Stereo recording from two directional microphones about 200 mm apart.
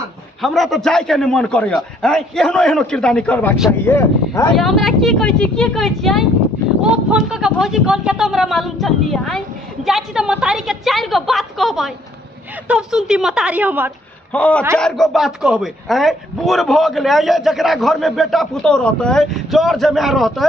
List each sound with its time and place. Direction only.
0.4 s speech: centre (ahead or behind)
4.6 s speech: centre (ahead or behind)
14.3 s a man's voice: 5° left (ahead or behind)